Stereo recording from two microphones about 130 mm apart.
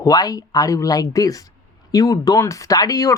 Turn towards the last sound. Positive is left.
turn(degrees=25)  # may be behind; listen again after turning